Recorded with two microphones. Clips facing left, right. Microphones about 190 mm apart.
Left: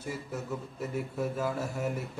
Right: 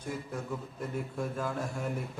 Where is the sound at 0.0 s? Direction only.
5° left (ahead or behind).